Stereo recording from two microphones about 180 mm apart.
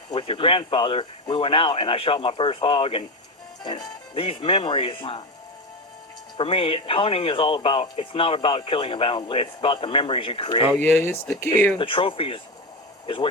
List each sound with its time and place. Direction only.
0.1 s speech: 30° left (ahead or behind)
6.3 s speech: 30° left (ahead or behind)
10.8 s speech: 10° left (ahead or behind)
11.8 s speech: 30° left (ahead or behind)